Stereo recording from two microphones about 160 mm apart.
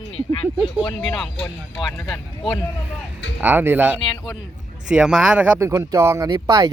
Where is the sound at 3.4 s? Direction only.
10° right (ahead or behind).